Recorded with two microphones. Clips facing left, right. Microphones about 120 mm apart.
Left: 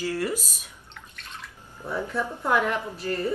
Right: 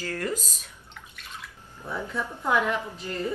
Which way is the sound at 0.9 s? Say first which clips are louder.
Even; centre (ahead or behind).